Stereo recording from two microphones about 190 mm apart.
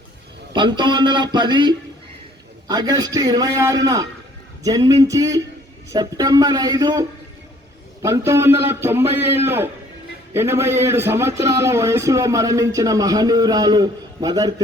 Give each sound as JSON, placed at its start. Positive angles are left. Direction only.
{"t": 0.5, "sound": "a man's voice", "side_deg": -25}
{"t": 8.0, "sound": "a man's voice", "side_deg": -15}